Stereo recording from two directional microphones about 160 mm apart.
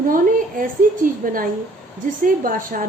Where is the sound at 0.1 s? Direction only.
60° right (ahead or behind).